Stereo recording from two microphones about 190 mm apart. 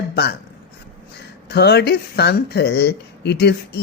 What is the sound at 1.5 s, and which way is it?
Speech, 60° left (ahead or behind).